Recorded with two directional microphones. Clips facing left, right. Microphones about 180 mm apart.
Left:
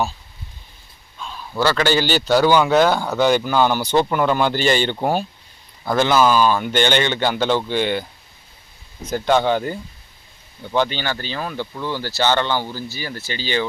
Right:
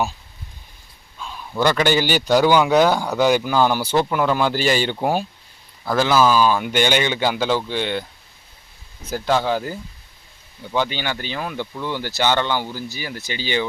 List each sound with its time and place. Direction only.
1.2 s a sound: 10° right (ahead or behind)
1.5 s speech: 15° right (ahead or behind); by 8.0 s centre (ahead or behind)
9.0 s speech: 5° right (ahead or behind)
10.8 s speech: 10° right (ahead or behind)
11.6 s speech: 10° left (ahead or behind)
11.9 s speech: 15° right (ahead or behind)